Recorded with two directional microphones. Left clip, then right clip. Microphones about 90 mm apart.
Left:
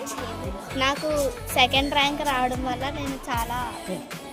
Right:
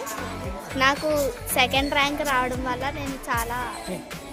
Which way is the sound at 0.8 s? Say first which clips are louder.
Right 2 dB; 35° right (ahead or behind).